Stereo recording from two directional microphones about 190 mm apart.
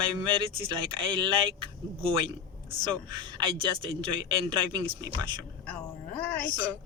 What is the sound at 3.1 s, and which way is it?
A man's voice, 25° right (ahead or behind).